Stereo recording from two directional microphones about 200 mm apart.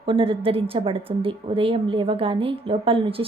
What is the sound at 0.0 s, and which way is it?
A woman's voice, 25° right (ahead or behind).